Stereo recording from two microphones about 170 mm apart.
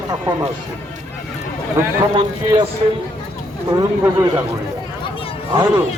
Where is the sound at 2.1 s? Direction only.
25° right (ahead or behind).